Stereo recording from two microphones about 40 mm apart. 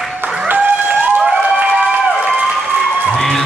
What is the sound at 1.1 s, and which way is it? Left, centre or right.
Applause, right.